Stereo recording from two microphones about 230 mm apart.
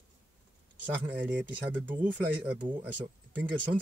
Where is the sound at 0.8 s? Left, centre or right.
Centre.